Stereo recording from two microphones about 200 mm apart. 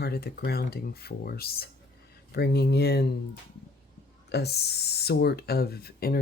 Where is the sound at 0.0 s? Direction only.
50° left (ahead or behind).